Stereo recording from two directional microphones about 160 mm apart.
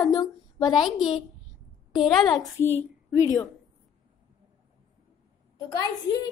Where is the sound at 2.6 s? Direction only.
15° left (ahead or behind).